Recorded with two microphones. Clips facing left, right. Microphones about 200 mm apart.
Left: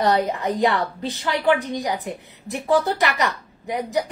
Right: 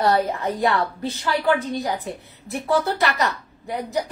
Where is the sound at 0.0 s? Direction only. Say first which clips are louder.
Even; 15° left (ahead or behind).